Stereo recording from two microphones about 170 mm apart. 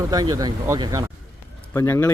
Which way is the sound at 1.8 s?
15° left (ahead or behind).